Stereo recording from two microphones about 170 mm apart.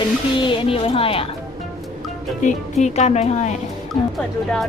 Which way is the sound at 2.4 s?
40° left (ahead or behind).